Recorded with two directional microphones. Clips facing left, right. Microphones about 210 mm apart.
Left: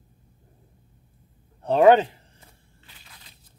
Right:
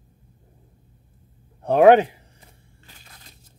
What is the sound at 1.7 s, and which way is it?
Speech, 15° right (ahead or behind).